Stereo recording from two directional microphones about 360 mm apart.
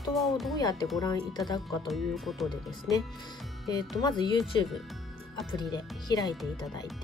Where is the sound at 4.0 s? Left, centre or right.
Centre.